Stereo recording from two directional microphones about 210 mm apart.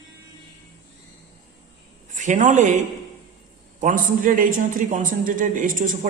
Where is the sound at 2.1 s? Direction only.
35° right (ahead or behind).